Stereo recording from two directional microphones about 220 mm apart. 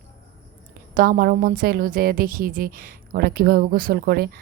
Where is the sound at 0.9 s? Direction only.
40° right (ahead or behind).